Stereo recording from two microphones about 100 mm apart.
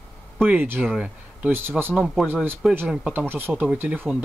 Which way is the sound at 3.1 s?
20° right (ahead or behind).